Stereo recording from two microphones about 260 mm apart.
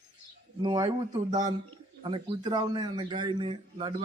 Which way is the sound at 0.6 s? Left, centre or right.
Centre.